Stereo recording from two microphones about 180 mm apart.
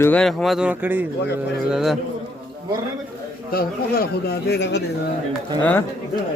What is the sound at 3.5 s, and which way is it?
A man's voice, 55° left (ahead or behind).